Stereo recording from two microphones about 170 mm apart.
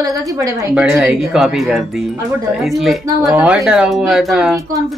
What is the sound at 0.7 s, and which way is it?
Speech, 5° right (ahead or behind).